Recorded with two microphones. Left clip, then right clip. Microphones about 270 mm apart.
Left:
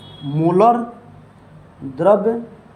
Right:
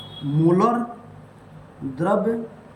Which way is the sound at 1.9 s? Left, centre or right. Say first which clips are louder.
Left 8 dB; centre.